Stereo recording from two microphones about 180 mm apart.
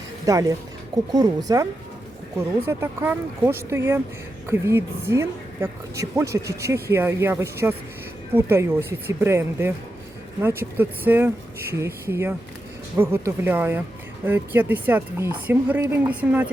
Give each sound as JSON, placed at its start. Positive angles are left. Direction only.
{"t": 0.3, "sound": "speech", "side_deg": -20}
{"t": 2.6, "sound": "a woman's voice", "side_deg": -10}